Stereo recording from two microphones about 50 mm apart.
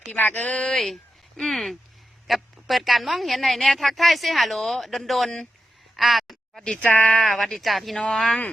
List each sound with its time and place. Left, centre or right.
0.1 s a woman's voice: left
0.4 s speech: centre
0.7 s a woman's voice: centre
6.7 s speech: left
7.2 s a woman's voice: centre